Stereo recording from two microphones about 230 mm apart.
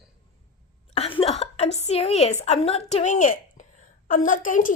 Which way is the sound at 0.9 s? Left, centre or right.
Left.